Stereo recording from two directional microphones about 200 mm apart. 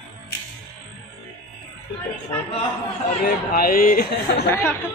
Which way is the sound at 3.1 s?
45° left (ahead or behind).